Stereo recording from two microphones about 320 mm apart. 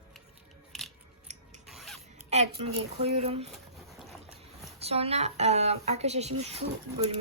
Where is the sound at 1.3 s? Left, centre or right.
Right.